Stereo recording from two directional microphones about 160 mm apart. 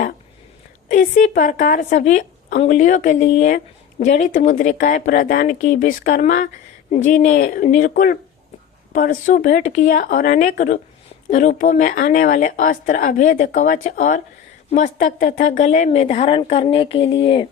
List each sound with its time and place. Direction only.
0.9 s a woman's voice: 50° left (ahead or behind)
6.9 s speech: 45° left (ahead or behind)